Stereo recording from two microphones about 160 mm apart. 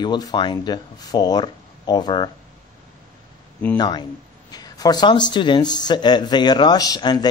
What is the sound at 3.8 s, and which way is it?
Speech, 25° left (ahead or behind).